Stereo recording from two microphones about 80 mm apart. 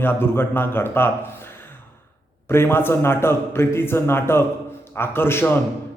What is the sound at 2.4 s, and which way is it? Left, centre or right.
Speech, left.